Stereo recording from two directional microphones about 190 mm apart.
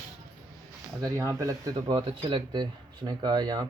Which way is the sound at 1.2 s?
15° right (ahead or behind).